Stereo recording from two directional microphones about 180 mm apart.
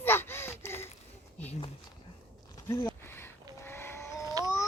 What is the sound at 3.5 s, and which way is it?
Vehicle, 15° left (ahead or behind).